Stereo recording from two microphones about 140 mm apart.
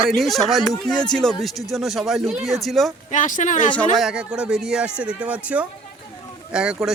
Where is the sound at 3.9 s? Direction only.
5° right (ahead or behind).